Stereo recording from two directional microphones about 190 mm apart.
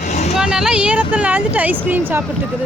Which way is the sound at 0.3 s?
5° right (ahead or behind).